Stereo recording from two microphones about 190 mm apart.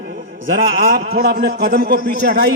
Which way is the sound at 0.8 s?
45° right (ahead or behind).